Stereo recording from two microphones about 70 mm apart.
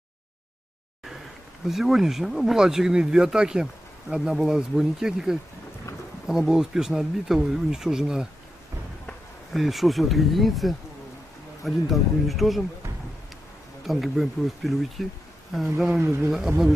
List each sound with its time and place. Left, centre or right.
1.7 s speech: centre
9.5 s speech: centre
13.8 s speech: centre
16.0 s speech: right
16.3 s speech: centre